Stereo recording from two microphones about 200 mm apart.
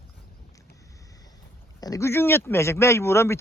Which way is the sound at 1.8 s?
15° left (ahead or behind).